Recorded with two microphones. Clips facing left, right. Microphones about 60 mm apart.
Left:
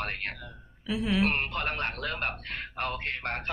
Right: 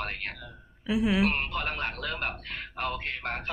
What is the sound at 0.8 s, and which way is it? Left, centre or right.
Speech, centre.